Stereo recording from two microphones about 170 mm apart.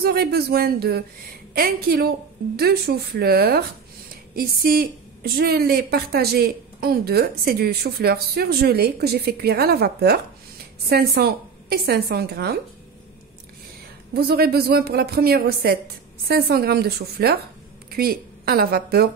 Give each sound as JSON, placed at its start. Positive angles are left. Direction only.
{"t": 0.0, "sound": "a woman's voice", "side_deg": -65}
{"t": 14.1, "sound": "a woman's voice", "side_deg": -65}